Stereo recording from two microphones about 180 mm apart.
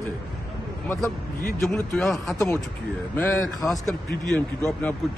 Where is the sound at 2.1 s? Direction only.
20° left (ahead or behind).